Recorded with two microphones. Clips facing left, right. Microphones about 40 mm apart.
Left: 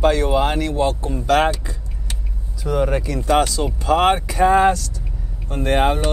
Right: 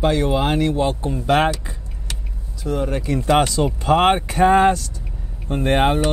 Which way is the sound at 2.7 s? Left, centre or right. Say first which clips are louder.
Left 2 dB; centre.